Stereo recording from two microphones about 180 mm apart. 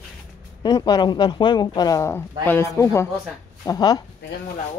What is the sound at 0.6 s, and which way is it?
Speech, 20° left (ahead or behind).